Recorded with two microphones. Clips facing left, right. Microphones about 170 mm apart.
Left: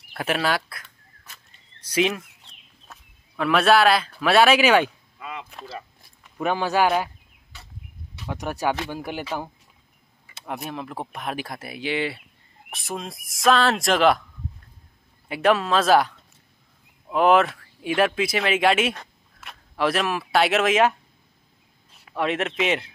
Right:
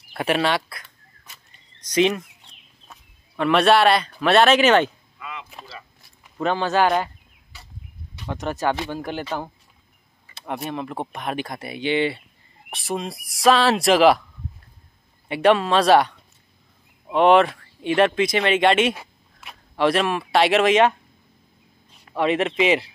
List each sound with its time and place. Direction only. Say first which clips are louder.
0.1 s chicken: right 3 dB; centre (ahead or behind)
1.9 s speech: right 3 dB; 5° left (ahead or behind)
5.2 s a sound: left 1 dB; 40° left (ahead or behind)
6.4 s speech: right 1 dB; 10° left (ahead or behind)
8.2 s speech: right 2 dB; 5° left (ahead or behind)
15.2 s speech: right 3 dB; centre (ahead or behind)
21.9 s a man's voice: right 4 dB; centre (ahead or behind)